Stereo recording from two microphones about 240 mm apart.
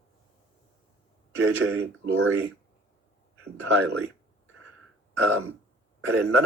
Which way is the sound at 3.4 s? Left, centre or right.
Right.